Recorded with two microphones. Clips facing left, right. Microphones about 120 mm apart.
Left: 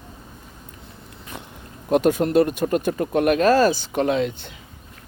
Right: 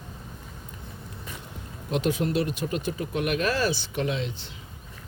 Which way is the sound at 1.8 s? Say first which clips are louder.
Left 8 dB; 50° left (ahead or behind).